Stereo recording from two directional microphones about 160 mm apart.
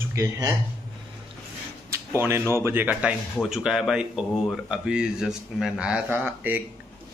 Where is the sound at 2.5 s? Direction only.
15° right (ahead or behind).